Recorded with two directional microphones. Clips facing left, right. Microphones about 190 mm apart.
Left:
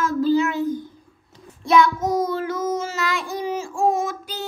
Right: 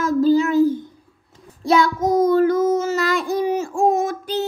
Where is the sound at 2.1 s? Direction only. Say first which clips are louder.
Right 8 dB; 50° right (ahead or behind).